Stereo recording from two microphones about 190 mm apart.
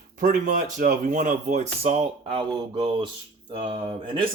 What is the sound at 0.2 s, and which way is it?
Speech, 45° right (ahead or behind).